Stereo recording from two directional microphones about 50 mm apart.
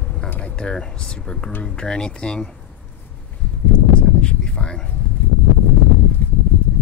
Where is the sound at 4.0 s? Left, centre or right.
Centre.